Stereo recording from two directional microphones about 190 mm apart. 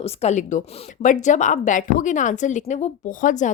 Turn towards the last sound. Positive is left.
turn(degrees=40)  # may be behind; listen again after turning